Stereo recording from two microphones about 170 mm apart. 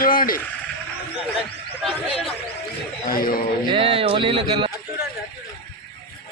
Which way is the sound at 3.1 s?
60° left (ahead or behind).